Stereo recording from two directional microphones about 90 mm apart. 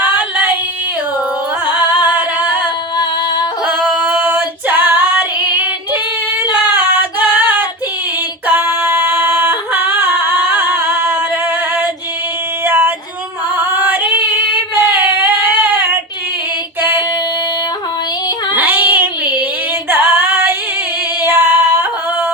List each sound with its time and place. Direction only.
0.0 s a sound: 20° right (ahead or behind)
2.0 s music: 20° right (ahead or behind)
3.7 s female singing: 20° right (ahead or behind)
6.5 s child singing: 20° right (ahead or behind)
8.4 s yodeling: 25° right (ahead or behind)
12.6 s female singing: 25° right (ahead or behind)
18.5 s child singing: 20° right (ahead or behind)
19.9 s female singing: 25° right (ahead or behind)
21.2 s yodeling: 25° right (ahead or behind)